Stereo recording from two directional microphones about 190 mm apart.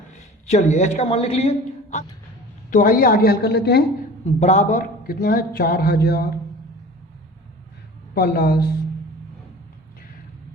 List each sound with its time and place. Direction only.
0.2 s a man's voice: 40° left (ahead or behind); by 3.8 s 60° left (ahead or behind)
4.3 s a man's voice: 35° left (ahead or behind); by 6.2 s 55° left (ahead or behind)
8.1 s a man's voice: 55° left (ahead or behind)